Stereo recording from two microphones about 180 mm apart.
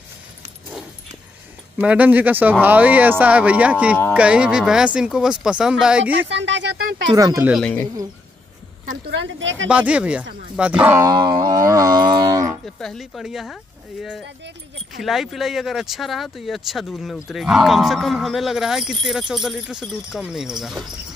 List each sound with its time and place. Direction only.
1.8 s speech: 10° right (ahead or behind)
6.1 s speech: 85° right
7.1 s speech: 20° right (ahead or behind)
7.5 s speech: 10° left (ahead or behind)
9.0 s speech: 85° right
9.7 s speech: 5° right (ahead or behind)
12.6 s speech: centre (ahead or behind)
15.0 s speech: centre (ahead or behind)